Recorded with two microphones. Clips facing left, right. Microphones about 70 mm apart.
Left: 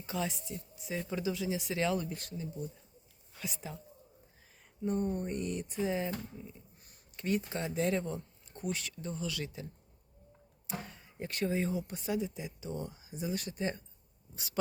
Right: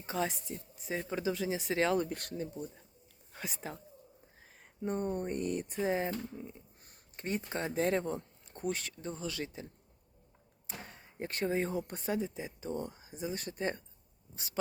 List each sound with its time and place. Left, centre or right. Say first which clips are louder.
0.0 s speech: right 2 dB; right
4.8 s speech: left 1 dB; right
10.8 s speech: right 1 dB; right
13.1 s speech: left 1 dB; right
14.3 s dog: left 2 dB; right